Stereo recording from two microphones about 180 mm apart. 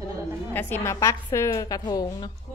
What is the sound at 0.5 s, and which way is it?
A woman's voice, 10° left (ahead or behind).